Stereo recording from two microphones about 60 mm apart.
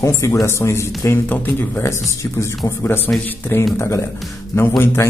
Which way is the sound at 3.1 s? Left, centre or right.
Left.